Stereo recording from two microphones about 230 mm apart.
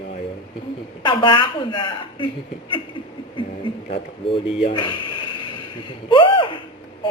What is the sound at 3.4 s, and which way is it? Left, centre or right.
A man's voice, left.